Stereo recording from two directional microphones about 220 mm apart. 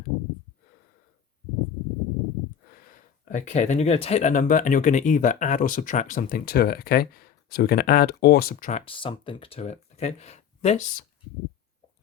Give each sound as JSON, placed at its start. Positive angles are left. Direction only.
{"t": 2.6, "sound": "speech", "side_deg": 40}
{"t": 8.8, "sound": "speech", "side_deg": 25}